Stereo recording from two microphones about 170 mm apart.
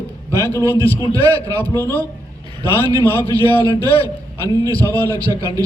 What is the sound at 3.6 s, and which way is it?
Speech, 30° left (ahead or behind).